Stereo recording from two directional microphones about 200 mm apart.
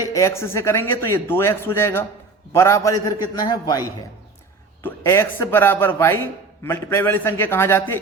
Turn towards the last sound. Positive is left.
turn(degrees=10)  # may be behind; listen again after turning